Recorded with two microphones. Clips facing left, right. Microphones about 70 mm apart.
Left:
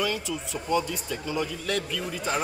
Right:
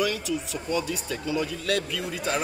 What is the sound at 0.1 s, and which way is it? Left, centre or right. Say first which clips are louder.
Speech: right 2 dB; left.